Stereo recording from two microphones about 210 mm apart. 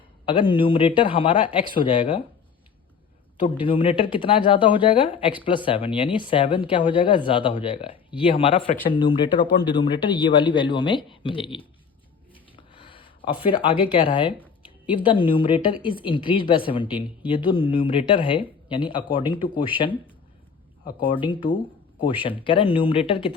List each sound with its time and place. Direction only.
0.3 s a woman's voice: 25° left (ahead or behind)
3.6 s a woman's voice: 25° left (ahead or behind)
12.5 s a sound: 25° left (ahead or behind)
13.9 s a woman's voice: 25° left (ahead or behind)
21.0 s a woman's voice: 25° left (ahead or behind)